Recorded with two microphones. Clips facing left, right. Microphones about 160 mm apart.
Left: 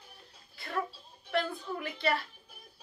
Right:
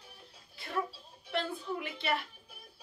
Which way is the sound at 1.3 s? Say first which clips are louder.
Left 2 dB; 20° right (ahead or behind).